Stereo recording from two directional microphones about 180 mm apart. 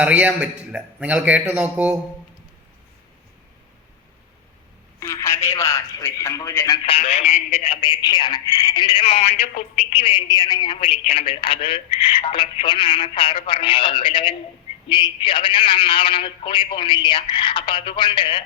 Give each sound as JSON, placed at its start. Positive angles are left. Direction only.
{"t": 0.0, "sound": "a man's voice", "side_deg": -5}
{"t": 4.9, "sound": "a man's voice", "side_deg": 15}
{"t": 6.8, "sound": "speech", "side_deg": 35}